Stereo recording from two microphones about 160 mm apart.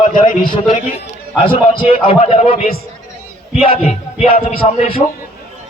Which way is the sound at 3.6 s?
40° left (ahead or behind).